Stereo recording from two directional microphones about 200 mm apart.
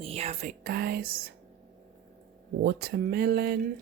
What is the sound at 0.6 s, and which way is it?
Speech, 50° right (ahead or behind).